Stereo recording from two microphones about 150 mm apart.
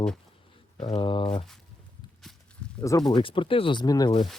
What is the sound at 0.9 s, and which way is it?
Speech, 30° left (ahead or behind).